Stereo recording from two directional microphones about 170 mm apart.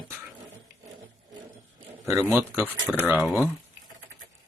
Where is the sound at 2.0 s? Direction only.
15° right (ahead or behind).